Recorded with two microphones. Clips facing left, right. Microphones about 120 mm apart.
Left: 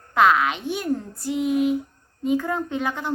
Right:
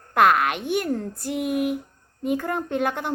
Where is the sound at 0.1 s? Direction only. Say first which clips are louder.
Even; 55° right (ahead or behind).